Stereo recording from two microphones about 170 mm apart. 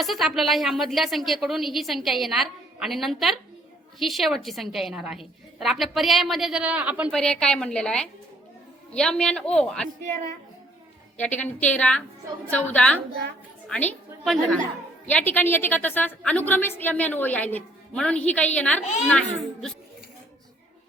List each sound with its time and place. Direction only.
0.0 s a woman's voice: centre (ahead or behind)
7.1 s a woman's voice: 5° left (ahead or behind)
11.2 s a woman's voice: 10° left (ahead or behind)